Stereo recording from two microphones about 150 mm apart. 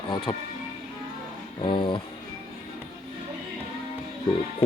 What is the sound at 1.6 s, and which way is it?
Speech, 30° left (ahead or behind).